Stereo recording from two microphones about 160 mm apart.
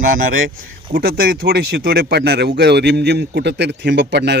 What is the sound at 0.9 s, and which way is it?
A man's voice, 70° right (ahead or behind).